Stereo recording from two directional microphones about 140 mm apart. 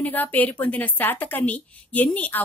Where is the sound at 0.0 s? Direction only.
10° left (ahead or behind).